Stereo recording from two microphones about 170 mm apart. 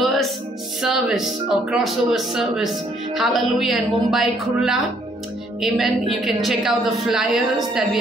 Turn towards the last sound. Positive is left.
turn(degrees=0)  # may be behind; listen again after turning